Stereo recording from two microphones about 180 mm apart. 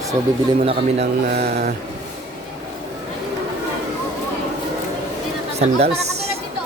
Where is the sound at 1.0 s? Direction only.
60° right (ahead or behind).